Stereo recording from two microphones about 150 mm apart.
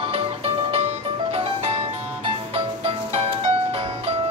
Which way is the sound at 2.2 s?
40° right (ahead or behind).